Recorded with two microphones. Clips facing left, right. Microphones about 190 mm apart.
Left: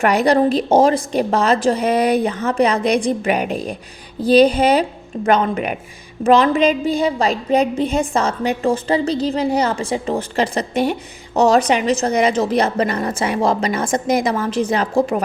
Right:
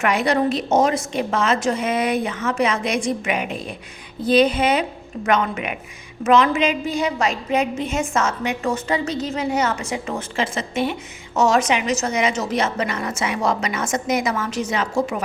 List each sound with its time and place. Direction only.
0.0 s a woman's voice: 35° left (ahead or behind)